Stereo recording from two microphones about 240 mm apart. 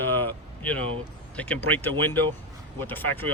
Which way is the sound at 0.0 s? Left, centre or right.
Centre.